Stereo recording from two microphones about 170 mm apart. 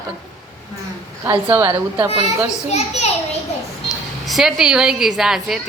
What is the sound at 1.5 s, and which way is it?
Speech, 15° right (ahead or behind).